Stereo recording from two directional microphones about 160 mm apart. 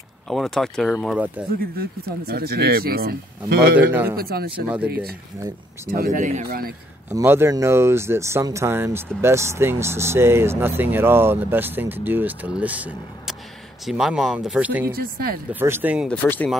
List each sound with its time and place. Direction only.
0.3 s speech: centre (ahead or behind)
1.8 s speech: 75° right (ahead or behind)
3.9 s speech: 10° right (ahead or behind)
4.2 s speech: 75° right (ahead or behind)
4.6 s speech: 10° right (ahead or behind)
5.9 s speech: 60° right (ahead or behind)
7.1 s speech: 15° right (ahead or behind)
15.0 s speech: 70° right (ahead or behind)
15.6 s speech: 10° right (ahead or behind)
16.1 s speech: 10° left (ahead or behind)